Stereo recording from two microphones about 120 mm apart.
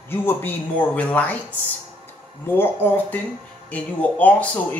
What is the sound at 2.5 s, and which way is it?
Speech, 20° left (ahead or behind).